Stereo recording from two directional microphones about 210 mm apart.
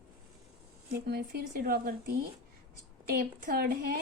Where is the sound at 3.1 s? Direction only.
45° right (ahead or behind).